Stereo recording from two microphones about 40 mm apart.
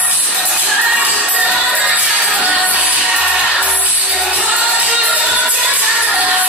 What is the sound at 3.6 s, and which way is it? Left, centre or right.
Music, right.